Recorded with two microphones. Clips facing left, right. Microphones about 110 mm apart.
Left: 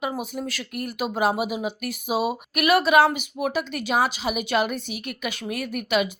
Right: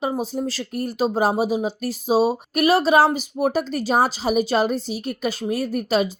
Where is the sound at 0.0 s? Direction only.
30° right (ahead or behind).